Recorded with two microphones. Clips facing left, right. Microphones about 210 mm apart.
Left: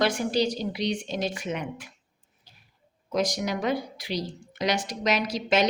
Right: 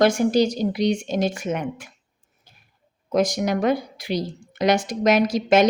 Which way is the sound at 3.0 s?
50° right (ahead or behind).